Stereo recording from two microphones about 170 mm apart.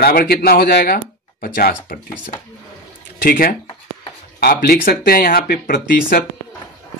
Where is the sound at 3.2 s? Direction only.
55° left (ahead or behind).